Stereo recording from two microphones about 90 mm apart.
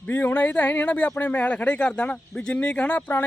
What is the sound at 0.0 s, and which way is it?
Speech, 25° left (ahead or behind).